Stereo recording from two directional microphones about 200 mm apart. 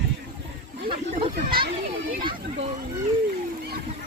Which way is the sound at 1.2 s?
50° right (ahead or behind).